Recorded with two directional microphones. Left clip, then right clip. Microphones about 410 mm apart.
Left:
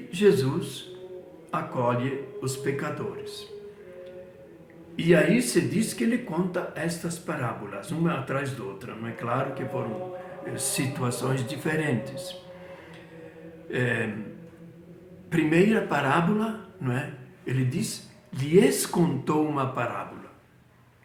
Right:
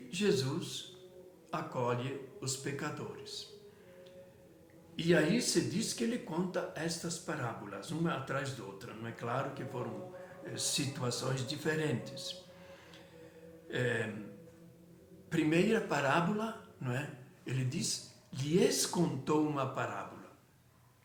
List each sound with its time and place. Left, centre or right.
0.1 s speech: right
4.9 s speech: right
13.7 s a sound: right
15.3 s speech: right